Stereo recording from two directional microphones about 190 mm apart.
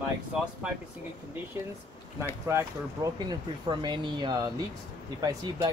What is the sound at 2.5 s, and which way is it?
Speech, 20° right (ahead or behind).